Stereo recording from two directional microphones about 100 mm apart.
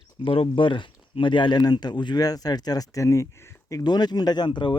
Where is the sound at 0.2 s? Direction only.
55° left (ahead or behind).